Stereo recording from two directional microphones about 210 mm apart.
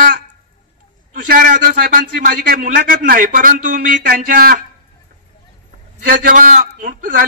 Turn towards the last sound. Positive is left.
turn(degrees=-40)  # may be behind; listen again after turning